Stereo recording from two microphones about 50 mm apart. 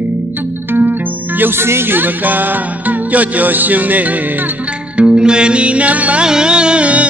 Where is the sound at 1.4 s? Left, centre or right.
Right.